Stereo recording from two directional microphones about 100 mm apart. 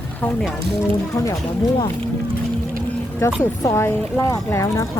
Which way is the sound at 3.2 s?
30° left (ahead or behind).